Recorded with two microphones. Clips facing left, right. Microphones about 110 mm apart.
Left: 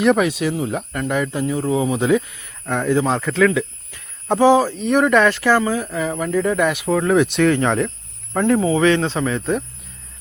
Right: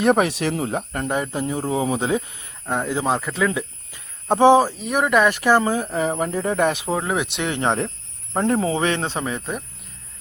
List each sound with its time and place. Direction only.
0.0 s speech: 35° right (ahead or behind)
4.8 s speech: 10° right (ahead or behind)
5.6 s speech: 30° right (ahead or behind)
6.8 s speech: 15° right (ahead or behind)